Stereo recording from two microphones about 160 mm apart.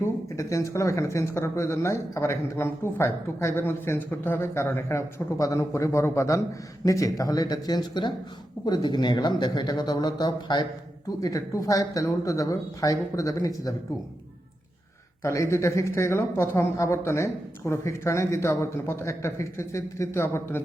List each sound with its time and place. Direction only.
0.0 s speech: 20° left (ahead or behind)
15.2 s speech: 20° left (ahead or behind)